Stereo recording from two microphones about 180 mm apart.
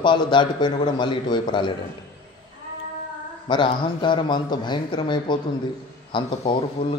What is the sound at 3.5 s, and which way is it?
A man's voice, 25° left (ahead or behind).